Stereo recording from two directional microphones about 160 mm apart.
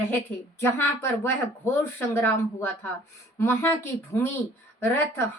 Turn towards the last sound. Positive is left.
turn(degrees=15)  # may be behind; listen again after turning